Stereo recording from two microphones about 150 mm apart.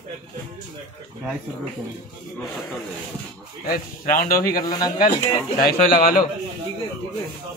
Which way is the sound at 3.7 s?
65° left (ahead or behind).